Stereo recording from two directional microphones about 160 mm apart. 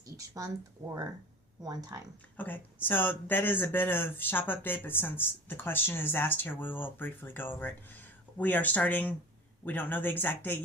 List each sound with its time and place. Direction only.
1.6 s speech: 25° right (ahead or behind)
2.3 s speech: 10° left (ahead or behind)